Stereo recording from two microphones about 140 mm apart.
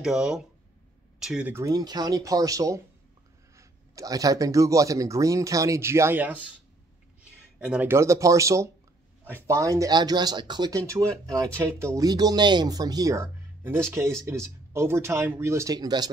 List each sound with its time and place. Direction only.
0.0 s speech: 5° right (ahead or behind)
1.5 s speech: 25° right (ahead or behind); by 7.9 s 5° right (ahead or behind)
7.9 s speech: 20° right (ahead or behind)